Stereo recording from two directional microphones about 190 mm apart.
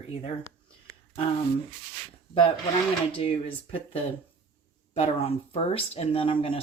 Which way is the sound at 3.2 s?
30° left (ahead or behind).